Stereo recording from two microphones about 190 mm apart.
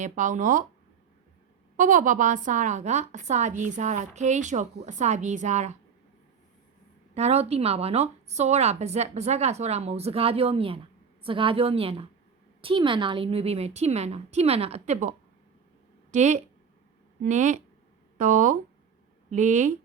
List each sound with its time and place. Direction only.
0.0 s a woman's voice: 40° right (ahead or behind)
1.7 s a woman's voice: 45° right (ahead or behind)
7.1 s a woman's voice: 35° right (ahead or behind)
16.1 s a woman's voice: 40° right (ahead or behind)